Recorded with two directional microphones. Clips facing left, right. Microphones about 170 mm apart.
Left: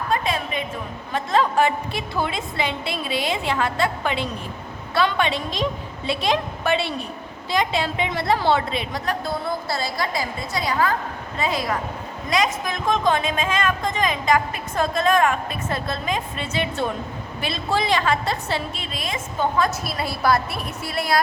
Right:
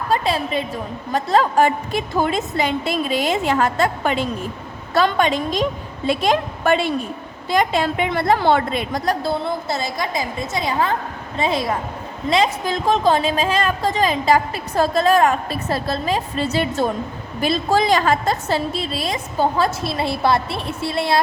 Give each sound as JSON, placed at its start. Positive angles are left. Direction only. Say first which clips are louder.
{"t": 0.1, "sound": "a woman's voice", "louder": "right 5 dB", "side_deg": -35}
{"t": 9.2, "sound": "a woman's voice", "louder": "right 4 dB", "side_deg": -25}